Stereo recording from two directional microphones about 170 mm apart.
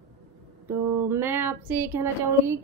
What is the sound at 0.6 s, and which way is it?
A woman's voice, 15° right (ahead or behind).